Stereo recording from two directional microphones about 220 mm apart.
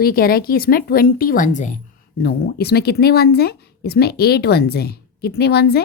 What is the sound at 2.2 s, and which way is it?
A woman's voice, 45° left (ahead or behind).